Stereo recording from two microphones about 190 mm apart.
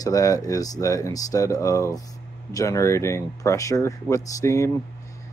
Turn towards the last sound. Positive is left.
turn(degrees=15)  # may be behind; listen again after turning